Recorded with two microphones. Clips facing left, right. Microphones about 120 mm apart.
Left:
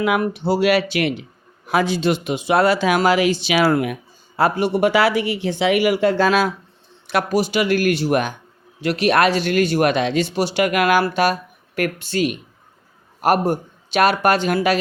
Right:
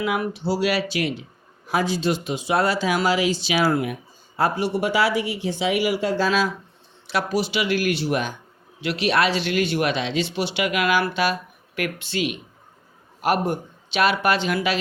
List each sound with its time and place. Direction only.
0.0 s speech: 55° left (ahead or behind)